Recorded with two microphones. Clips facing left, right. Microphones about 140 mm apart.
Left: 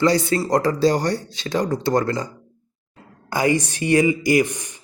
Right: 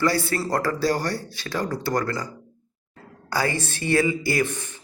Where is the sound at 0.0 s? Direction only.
20° left (ahead or behind).